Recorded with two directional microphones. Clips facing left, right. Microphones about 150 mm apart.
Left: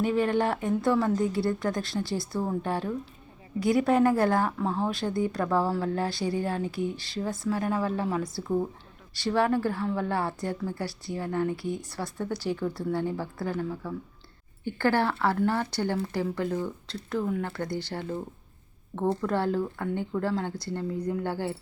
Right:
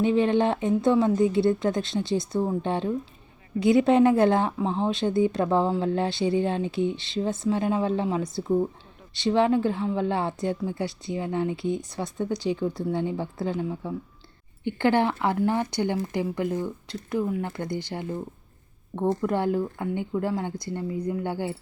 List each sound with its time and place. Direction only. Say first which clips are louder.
0.0 s speech: right 4 dB; 20° right (ahead or behind)
19.2 s speech: right 2 dB; 15° right (ahead or behind)